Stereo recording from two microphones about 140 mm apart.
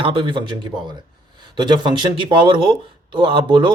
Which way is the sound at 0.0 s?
35° right (ahead or behind).